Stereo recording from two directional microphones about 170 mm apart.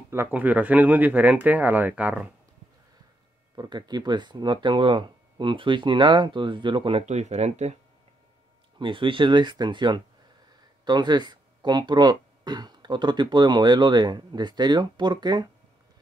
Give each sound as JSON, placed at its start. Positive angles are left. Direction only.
{"t": 0.1, "sound": "speech", "side_deg": -10}
{"t": 3.5, "sound": "speech", "side_deg": -25}
{"t": 8.7, "sound": "speech", "side_deg": -30}